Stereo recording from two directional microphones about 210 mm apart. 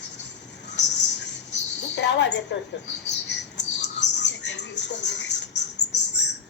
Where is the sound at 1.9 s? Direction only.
55° left (ahead or behind).